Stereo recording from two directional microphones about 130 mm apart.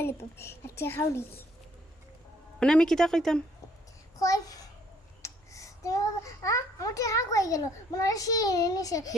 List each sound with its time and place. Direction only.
0.0 s a child's voice: 20° left (ahead or behind)
2.6 s a woman's voice: 5° left (ahead or behind)
4.2 s a child's voice: 25° left (ahead or behind)